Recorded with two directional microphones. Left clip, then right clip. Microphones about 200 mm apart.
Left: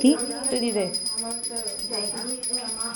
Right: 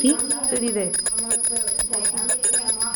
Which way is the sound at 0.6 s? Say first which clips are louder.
Left 1 dB; 20° right (ahead or behind).